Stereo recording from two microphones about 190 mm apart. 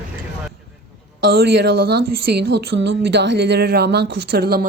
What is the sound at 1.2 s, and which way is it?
A woman's voice, 55° right (ahead or behind).